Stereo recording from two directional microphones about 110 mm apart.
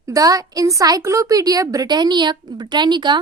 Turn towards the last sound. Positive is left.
turn(degrees=-45)  # may be behind; listen again after turning